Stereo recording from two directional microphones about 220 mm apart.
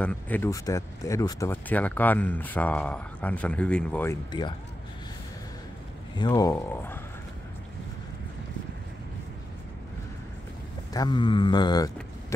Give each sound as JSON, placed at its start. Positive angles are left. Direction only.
{"t": 0.0, "sound": "speech", "side_deg": 5}
{"t": 6.1, "sound": "speech", "side_deg": 20}
{"t": 10.9, "sound": "speech", "side_deg": 20}